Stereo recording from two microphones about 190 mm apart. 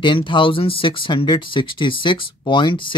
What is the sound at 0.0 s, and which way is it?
Speech, 25° left (ahead or behind).